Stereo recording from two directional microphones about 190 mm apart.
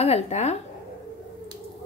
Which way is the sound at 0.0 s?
35° left (ahead or behind).